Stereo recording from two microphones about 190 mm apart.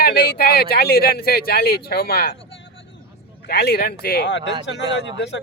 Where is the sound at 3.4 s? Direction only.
55° left (ahead or behind).